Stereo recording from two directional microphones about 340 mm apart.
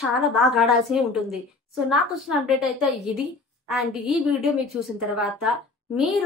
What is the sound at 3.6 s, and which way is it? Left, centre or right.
A woman's voice, centre.